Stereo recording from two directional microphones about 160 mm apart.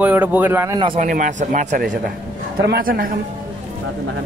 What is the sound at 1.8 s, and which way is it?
A woman's voice, 70° right (ahead or behind).